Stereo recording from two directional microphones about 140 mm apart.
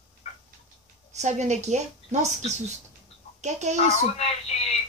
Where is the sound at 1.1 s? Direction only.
55° right (ahead or behind).